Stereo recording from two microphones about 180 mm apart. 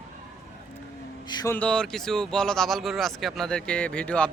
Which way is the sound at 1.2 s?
20° left (ahead or behind).